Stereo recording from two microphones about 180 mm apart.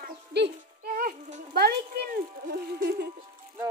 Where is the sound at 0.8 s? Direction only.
50° right (ahead or behind).